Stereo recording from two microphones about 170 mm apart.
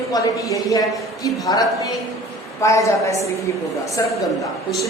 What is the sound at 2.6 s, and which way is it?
Speech, 20° left (ahead or behind).